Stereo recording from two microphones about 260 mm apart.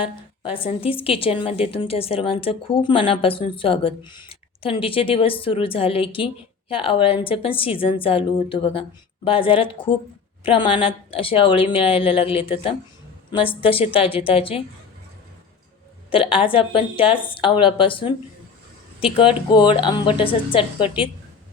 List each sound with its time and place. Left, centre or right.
0.0 s a woman's voice: left
16.0 s a woman's voice: centre